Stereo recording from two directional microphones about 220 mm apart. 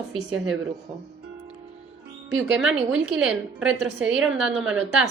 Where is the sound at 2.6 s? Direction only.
5° right (ahead or behind).